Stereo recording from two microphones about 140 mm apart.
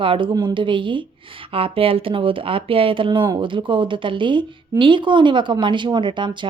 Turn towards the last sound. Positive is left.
turn(degrees=-35)  # may be behind; listen again after turning